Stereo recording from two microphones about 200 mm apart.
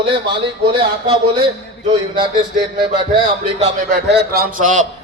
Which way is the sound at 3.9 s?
55° right (ahead or behind).